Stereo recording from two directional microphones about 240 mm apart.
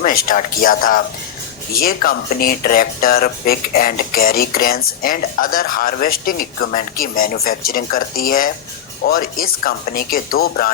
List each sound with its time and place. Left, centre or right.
0.0 s speech: left